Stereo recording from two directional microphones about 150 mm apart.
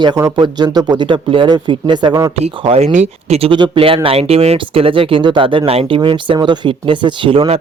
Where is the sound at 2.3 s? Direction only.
40° right (ahead or behind).